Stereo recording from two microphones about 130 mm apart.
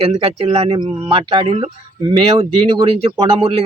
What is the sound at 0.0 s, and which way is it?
Speech, 50° right (ahead or behind).